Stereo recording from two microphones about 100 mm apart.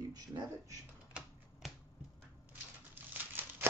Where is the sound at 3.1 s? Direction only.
20° right (ahead or behind).